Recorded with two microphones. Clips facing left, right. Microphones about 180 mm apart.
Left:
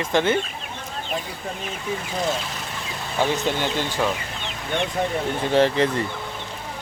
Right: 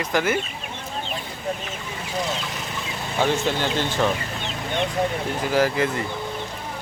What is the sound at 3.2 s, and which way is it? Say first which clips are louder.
Speech: even; 15° left (ahead or behind).